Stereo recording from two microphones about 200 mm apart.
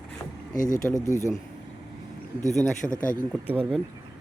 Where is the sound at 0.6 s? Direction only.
40° left (ahead or behind).